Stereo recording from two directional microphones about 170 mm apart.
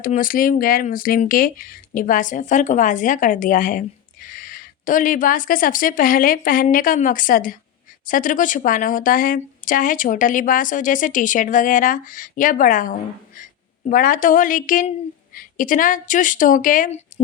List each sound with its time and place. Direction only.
0.0 s speech: 55° left (ahead or behind)